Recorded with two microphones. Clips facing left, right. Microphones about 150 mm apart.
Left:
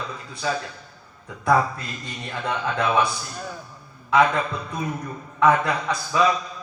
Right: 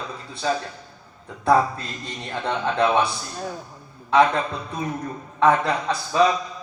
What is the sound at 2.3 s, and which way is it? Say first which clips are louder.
Speech: right 2 dB; 30° right (ahead or behind).